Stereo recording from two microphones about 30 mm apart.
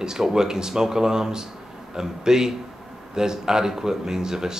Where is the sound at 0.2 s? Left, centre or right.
Centre.